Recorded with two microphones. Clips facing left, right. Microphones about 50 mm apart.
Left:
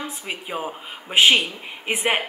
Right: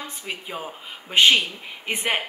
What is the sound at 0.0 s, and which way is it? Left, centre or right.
A woman's voice, centre.